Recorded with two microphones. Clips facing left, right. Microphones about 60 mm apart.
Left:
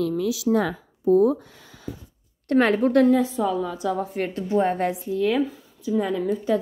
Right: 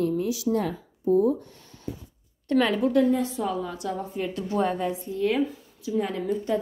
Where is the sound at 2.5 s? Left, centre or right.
Left.